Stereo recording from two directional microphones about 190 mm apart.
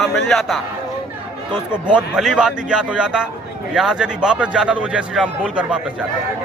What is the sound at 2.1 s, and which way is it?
A man's voice, 5° right (ahead or behind).